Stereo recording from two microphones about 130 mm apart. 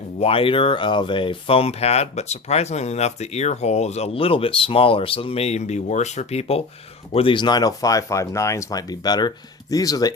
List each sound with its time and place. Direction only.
0.2 s speech: 45° left (ahead or behind)
7.1 s speech: 45° left (ahead or behind); by 10.1 s 30° left (ahead or behind)